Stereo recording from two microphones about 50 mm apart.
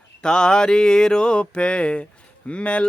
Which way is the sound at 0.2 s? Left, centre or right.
Centre.